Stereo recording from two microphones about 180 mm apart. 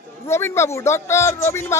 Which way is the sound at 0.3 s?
15° left (ahead or behind).